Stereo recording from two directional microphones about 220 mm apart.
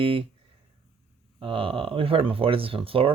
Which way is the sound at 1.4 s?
25° right (ahead or behind).